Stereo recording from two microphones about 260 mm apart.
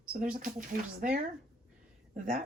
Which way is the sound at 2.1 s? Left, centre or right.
Right.